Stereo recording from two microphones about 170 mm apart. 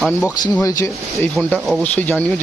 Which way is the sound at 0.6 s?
20° left (ahead or behind).